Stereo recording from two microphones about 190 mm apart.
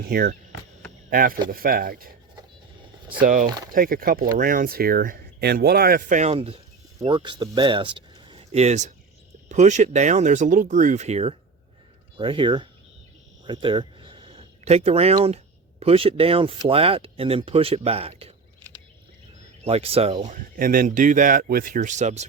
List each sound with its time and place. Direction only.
0.1 s speech: 50° right (ahead or behind)
3.2 s speech: 45° right (ahead or behind); by 12.6 s 25° right (ahead or behind)
13.4 s a sound: 25° right (ahead or behind)
15.8 s speech: 30° right (ahead or behind)
19.6 s speech: 30° right (ahead or behind)
20.3 s speech: 45° right (ahead or behind)